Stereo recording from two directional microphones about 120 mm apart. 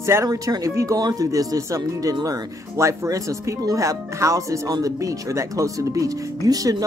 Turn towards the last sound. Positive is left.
turn(degrees=-30)  # may be behind; listen again after turning